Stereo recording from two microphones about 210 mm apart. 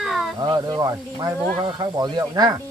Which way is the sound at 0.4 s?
20° right (ahead or behind).